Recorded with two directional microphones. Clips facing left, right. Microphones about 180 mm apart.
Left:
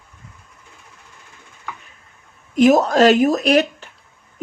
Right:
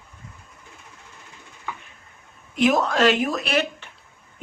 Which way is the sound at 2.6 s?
40° left (ahead or behind).